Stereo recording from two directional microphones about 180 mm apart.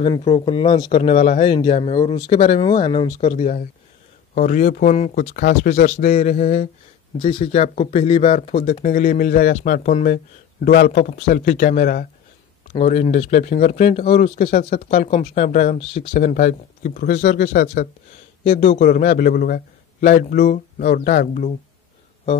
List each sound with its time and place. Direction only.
0.0 s speech: 30° left (ahead or behind)
4.4 s a man's voice: 45° left (ahead or behind)
5.3 s a man's voice: 55° left (ahead or behind)
7.2 s speech: 35° left (ahead or behind)
8.8 s a man's voice: 50° left (ahead or behind)
12.7 s speech: 40° left (ahead or behind)
16.2 s a man's voice: 45° left (ahead or behind)